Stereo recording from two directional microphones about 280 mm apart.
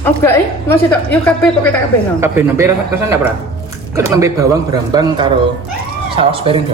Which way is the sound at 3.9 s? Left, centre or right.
Centre.